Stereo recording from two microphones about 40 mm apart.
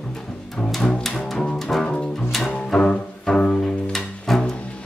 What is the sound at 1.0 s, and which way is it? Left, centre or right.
Music, centre.